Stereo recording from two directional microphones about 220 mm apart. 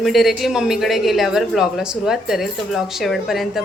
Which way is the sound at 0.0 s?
Centre (ahead or behind).